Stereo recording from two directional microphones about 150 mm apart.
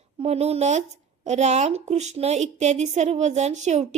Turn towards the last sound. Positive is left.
turn(degrees=-50)  # may be behind; listen again after turning